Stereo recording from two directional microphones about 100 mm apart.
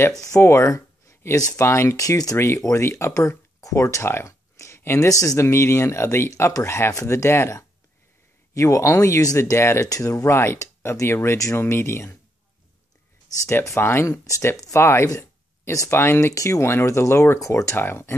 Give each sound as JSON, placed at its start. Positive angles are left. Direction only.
{"t": 0.2, "sound": "speech", "side_deg": 30}
{"t": 13.5, "sound": "speech", "side_deg": 25}